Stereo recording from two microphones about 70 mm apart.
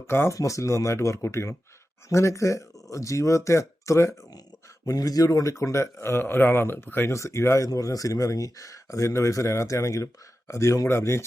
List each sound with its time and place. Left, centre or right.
0.1 s speech: left
0.3 s speech: left
4.9 s speech: left
7.1 s speech: left
7.7 s speech: left